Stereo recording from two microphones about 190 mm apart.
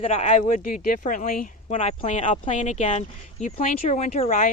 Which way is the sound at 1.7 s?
35° left (ahead or behind).